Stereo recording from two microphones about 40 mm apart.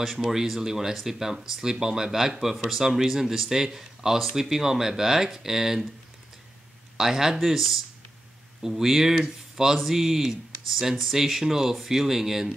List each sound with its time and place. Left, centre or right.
0.2 s speech: centre
7.0 s speech: centre